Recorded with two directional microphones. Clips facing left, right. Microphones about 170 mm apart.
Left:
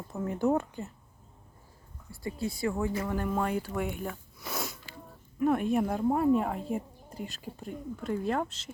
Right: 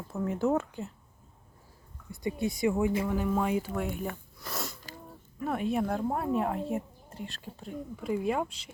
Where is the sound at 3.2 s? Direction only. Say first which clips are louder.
Right 2 dB; 5° right (ahead or behind).